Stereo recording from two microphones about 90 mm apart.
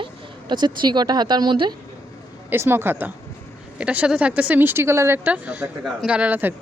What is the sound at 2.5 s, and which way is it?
Speech, 25° right (ahead or behind).